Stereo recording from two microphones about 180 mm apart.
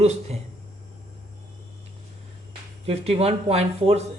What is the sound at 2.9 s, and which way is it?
Speech, 35° right (ahead or behind).